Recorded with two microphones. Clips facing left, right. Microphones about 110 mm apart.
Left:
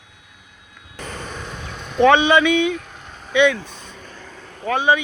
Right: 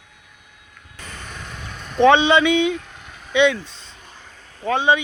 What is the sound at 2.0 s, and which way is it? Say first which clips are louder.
Speech: even; 25° right (ahead or behind).